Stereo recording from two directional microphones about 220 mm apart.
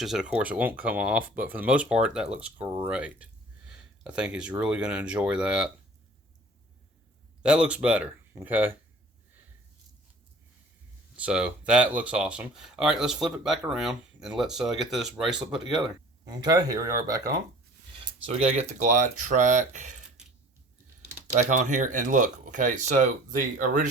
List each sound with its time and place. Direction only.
0.0 s speech: centre (ahead or behind)
7.4 s speech: 5° right (ahead or behind)
11.2 s speech: 5° right (ahead or behind)
16.2 s speech: 20° right (ahead or behind)
18.0 s speech: 25° right (ahead or behind)
21.5 s speech: 35° right (ahead or behind)